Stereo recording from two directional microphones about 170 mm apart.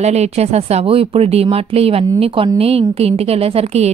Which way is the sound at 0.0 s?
40° right (ahead or behind).